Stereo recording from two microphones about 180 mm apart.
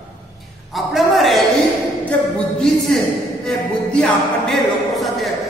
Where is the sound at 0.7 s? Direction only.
Centre (ahead or behind).